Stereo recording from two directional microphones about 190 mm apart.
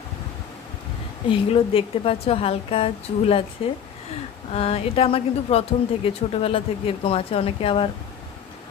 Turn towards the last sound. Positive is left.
turn(degrees=30)  # may be behind; listen again after turning